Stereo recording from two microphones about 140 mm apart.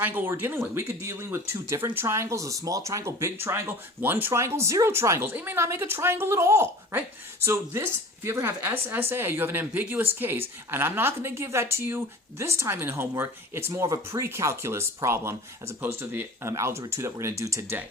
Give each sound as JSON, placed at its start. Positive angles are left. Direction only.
{"t": 0.0, "sound": "a woman's voice", "side_deg": -15}